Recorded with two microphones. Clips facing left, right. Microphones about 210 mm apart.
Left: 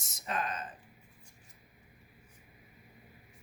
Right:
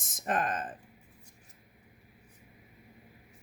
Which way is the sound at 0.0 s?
50° right (ahead or behind).